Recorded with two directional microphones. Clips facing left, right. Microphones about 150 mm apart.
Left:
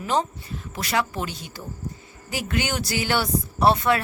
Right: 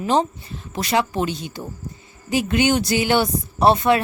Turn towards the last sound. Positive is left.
turn(degrees=-20)  # may be behind; listen again after turning